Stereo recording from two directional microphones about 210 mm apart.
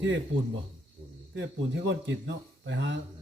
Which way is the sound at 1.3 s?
55° right (ahead or behind).